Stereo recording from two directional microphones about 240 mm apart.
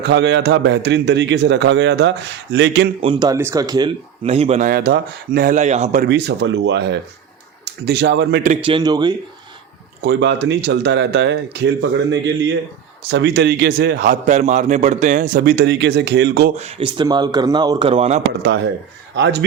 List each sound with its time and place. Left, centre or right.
0.0 s a man's voice: right
3.0 s speech: centre
6.1 s a man's voice: right
8.4 s speech: right
10.0 s a man's voice: right
16.6 s speech: right
19.1 s a man's voice: right